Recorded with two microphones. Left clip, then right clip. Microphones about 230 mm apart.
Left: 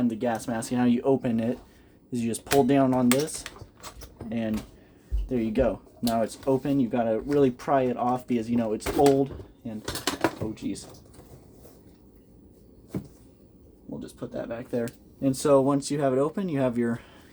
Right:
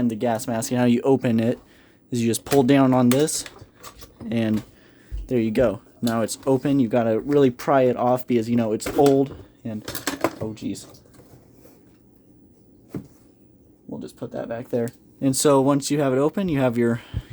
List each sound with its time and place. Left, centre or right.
0.0 s speech: right
4.3 s speech: right
14.0 s speech: right